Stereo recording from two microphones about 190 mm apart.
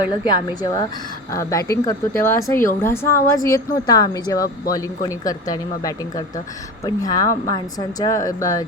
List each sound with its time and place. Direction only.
0.1 s speech: 20° left (ahead or behind)